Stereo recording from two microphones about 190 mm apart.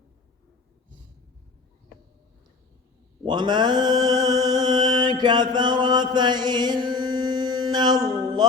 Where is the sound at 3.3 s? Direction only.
25° right (ahead or behind).